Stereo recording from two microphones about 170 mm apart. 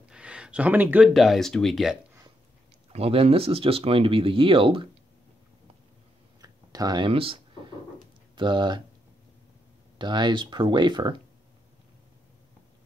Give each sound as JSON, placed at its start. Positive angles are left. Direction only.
{"t": 0.1, "sound": "speech", "side_deg": -5}
{"t": 2.9, "sound": "speech", "side_deg": -35}
{"t": 6.4, "sound": "a sound", "side_deg": -20}
{"t": 8.4, "sound": "speech", "side_deg": -25}
{"t": 9.9, "sound": "speech", "side_deg": -25}